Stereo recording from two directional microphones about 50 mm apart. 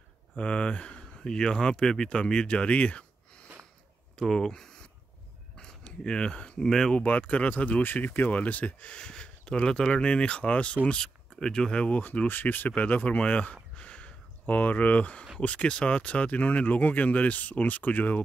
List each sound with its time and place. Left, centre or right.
0.4 s speech: left
4.2 s speech: centre
7.0 s speech: left
7.8 s speech: left
10.9 s speech: centre
12.3 s speech: left
13.7 s a sound: left
15.4 s speech: left